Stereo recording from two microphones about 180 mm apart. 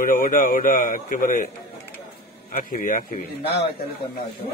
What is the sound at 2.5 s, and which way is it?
Speech, 45° left (ahead or behind).